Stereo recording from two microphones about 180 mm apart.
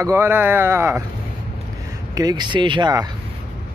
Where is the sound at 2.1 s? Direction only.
20° right (ahead or behind).